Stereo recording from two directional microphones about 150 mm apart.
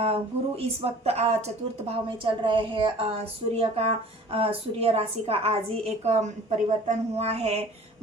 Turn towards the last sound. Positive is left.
turn(degrees=-45)  # may be behind; listen again after turning